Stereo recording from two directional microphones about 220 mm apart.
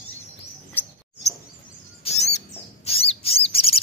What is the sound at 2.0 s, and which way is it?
Chirp, 30° left (ahead or behind).